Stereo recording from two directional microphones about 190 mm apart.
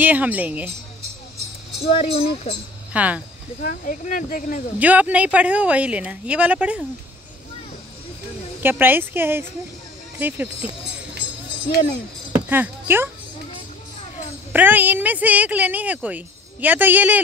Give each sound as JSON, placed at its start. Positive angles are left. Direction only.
{"t": 0.0, "sound": "a woman's voice", "side_deg": -10}
{"t": 1.9, "sound": "speech", "side_deg": 30}
{"t": 2.9, "sound": "speech", "side_deg": -10}
{"t": 3.6, "sound": "speech", "side_deg": 45}
{"t": 4.7, "sound": "a woman's voice", "side_deg": -10}
{"t": 8.6, "sound": "a woman's voice", "side_deg": -10}
{"t": 12.3, "sound": "music", "side_deg": -10}
{"t": 14.5, "sound": "a woman's voice", "side_deg": -10}